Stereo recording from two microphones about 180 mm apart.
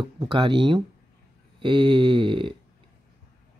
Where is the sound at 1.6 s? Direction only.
25° right (ahead or behind).